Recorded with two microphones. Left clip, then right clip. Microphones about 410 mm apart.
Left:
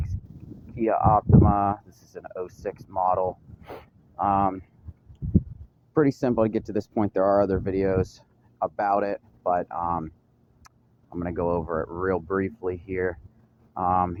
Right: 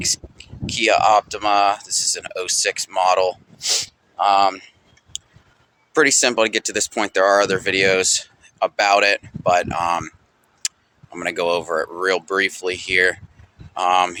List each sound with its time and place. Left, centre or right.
0.9 s speech: left
5.9 s speech: left
7.7 s speech: left
11.1 s speech: left